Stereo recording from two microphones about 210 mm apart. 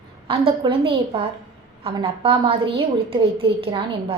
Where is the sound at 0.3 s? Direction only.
25° right (ahead or behind).